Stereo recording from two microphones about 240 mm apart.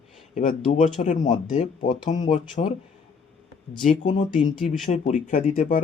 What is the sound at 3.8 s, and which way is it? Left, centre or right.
Speech, left.